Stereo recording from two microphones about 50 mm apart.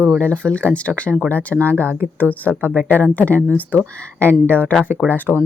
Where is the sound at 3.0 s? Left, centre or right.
Left.